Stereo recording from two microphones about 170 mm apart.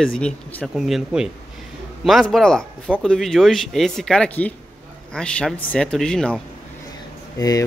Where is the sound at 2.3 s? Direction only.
5° left (ahead or behind).